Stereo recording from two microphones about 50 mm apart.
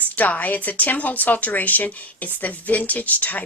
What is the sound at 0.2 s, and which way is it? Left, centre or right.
Speech, left.